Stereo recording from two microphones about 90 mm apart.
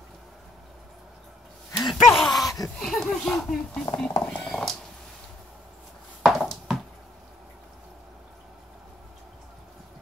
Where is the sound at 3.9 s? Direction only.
10° left (ahead or behind).